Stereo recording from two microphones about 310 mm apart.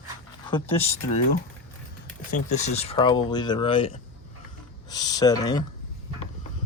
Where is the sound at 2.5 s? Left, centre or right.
Left.